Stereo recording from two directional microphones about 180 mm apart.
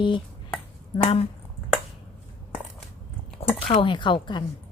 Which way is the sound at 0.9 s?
30° left (ahead or behind).